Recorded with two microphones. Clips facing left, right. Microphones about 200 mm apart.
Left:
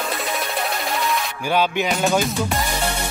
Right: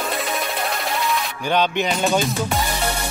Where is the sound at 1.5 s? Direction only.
5° left (ahead or behind).